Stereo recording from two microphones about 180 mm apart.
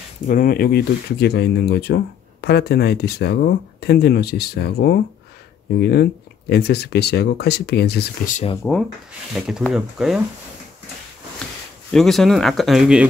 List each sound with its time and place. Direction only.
0.3 s speech: 50° left (ahead or behind)
8.6 s rub: 10° left (ahead or behind)
9.6 s speech: centre (ahead or behind)
11.9 s speech: centre (ahead or behind)